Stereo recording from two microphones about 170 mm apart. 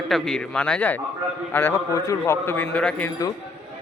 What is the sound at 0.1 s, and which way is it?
Speech, 5° left (ahead or behind).